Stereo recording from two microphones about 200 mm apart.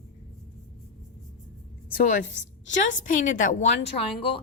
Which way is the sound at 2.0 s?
40° left (ahead or behind).